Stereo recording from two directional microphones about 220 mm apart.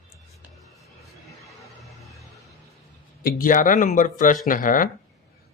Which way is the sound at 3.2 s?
40° left (ahead or behind).